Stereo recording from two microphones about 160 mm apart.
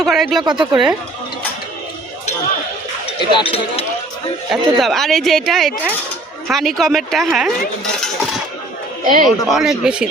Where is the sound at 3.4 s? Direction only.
35° left (ahead or behind).